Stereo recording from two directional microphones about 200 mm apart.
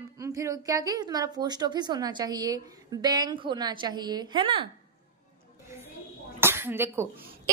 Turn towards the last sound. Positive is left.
turn(degrees=-10)  # may be behind; listen again after turning